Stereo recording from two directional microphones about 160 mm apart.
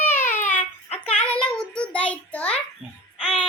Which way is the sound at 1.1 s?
5° left (ahead or behind).